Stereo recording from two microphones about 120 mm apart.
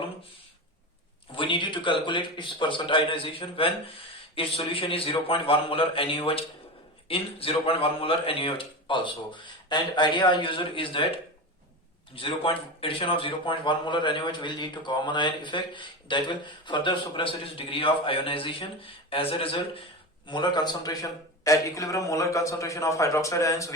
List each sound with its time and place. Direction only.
1.4 s a man's voice: 45° left (ahead or behind)
12.1 s a man's voice: 45° left (ahead or behind); by 23.7 s 25° left (ahead or behind)